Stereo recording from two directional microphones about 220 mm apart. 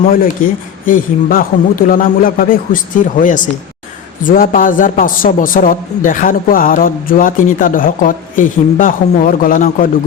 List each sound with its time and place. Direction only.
0.0 s a man's voice: 40° left (ahead or behind)